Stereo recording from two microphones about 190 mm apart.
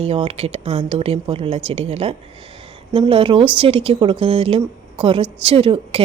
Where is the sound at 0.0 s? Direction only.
30° right (ahead or behind).